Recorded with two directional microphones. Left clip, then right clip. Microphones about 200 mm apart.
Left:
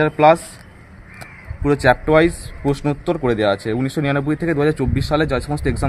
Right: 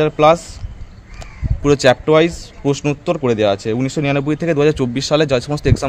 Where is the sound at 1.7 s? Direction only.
50° right (ahead or behind).